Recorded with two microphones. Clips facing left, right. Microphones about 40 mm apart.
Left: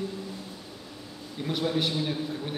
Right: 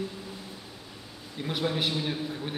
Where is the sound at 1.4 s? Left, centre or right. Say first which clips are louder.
Left 1 dB; centre.